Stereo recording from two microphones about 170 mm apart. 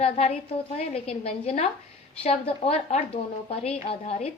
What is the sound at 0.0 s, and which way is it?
A woman's voice, 35° left (ahead or behind).